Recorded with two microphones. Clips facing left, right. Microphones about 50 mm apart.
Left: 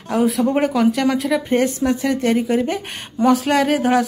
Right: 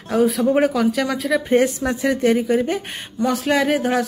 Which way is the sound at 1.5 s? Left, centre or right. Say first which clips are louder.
Right 2 dB; centre.